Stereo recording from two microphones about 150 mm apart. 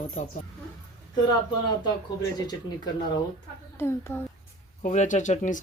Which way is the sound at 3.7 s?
15° left (ahead or behind).